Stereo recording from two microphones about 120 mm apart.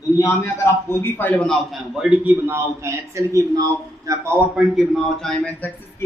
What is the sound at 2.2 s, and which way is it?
A man's voice, 20° right (ahead or behind).